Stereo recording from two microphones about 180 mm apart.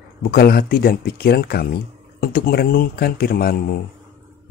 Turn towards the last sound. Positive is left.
turn(degrees=55)  # may be behind; listen again after turning